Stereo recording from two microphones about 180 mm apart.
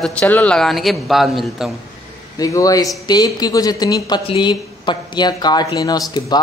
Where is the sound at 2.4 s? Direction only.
20° left (ahead or behind).